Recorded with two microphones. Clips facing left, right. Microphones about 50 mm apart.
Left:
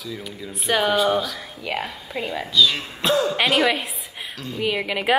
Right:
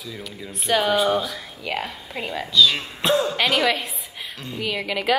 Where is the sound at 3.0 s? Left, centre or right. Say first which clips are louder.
Even; right.